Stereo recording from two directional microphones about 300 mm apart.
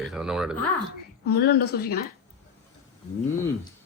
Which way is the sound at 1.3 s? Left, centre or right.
Left.